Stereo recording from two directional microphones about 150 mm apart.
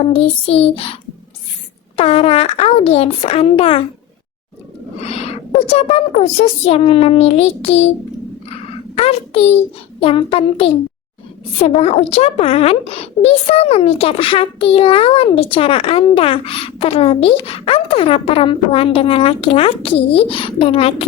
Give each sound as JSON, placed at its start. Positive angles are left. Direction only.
{"t": 0.0, "sound": "a child's voice", "side_deg": 40}
{"t": 2.0, "sound": "a child's voice", "side_deg": 40}
{"t": 4.9, "sound": "owl", "side_deg": 45}
{"t": 5.6, "sound": "a child's voice", "side_deg": 45}
{"t": 9.0, "sound": "a child's voice", "side_deg": 40}